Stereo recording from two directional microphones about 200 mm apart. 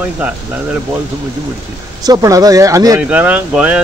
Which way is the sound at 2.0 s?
15° right (ahead or behind).